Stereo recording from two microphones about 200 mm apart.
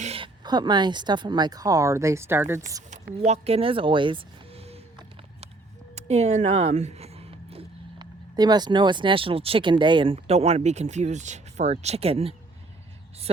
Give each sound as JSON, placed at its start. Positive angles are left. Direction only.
{"t": 0.0, "sound": "speech", "side_deg": -30}
{"t": 2.9, "sound": "speech", "side_deg": -35}
{"t": 5.9, "sound": "speech", "side_deg": -35}